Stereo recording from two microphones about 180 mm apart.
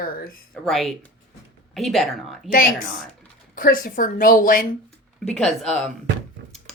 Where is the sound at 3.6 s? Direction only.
50° left (ahead or behind).